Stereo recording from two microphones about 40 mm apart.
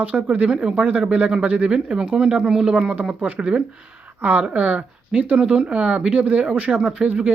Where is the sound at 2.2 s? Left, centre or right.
Right.